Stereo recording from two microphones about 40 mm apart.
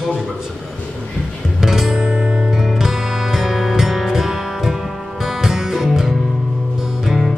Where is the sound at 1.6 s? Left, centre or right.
Centre.